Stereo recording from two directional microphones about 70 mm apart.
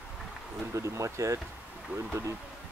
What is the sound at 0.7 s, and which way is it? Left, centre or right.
Speech, right.